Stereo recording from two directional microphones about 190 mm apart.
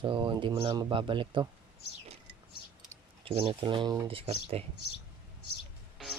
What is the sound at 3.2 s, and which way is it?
Speech, 30° right (ahead or behind).